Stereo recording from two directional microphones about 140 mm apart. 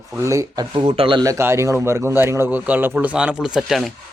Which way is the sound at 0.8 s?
40° right (ahead or behind).